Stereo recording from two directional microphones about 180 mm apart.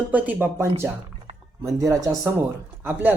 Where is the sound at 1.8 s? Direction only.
20° right (ahead or behind).